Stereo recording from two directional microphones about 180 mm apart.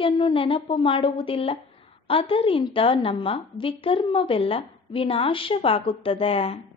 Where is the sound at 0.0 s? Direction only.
30° left (ahead or behind).